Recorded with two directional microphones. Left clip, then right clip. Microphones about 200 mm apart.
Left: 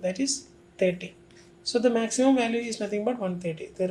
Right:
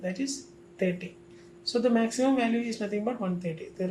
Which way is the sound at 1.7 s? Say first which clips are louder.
Left 2 dB; 30° left (ahead or behind).